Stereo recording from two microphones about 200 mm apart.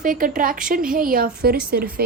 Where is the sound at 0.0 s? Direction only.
45° right (ahead or behind).